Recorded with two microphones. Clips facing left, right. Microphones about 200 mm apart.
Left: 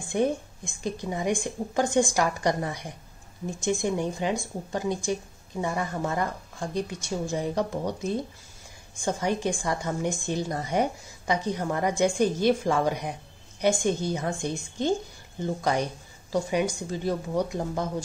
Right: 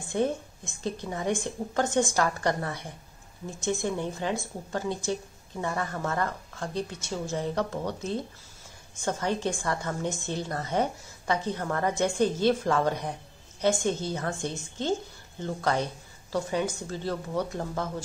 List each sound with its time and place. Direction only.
0.1 s a woman's voice: 15° left (ahead or behind)